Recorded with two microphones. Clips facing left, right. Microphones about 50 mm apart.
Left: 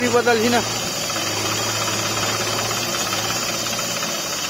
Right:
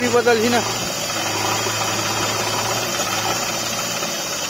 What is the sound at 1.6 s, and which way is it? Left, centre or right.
Engine, centre.